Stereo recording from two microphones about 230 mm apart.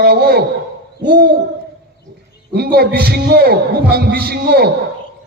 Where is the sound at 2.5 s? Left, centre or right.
Right.